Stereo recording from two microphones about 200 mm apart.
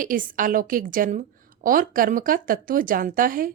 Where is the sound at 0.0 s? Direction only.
40° right (ahead or behind).